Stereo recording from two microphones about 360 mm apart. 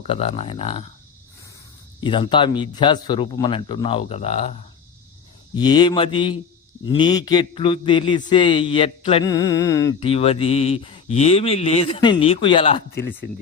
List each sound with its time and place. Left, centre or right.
0.0 s a man's voice: centre
2.0 s a man's voice: centre
5.5 s a man's voice: centre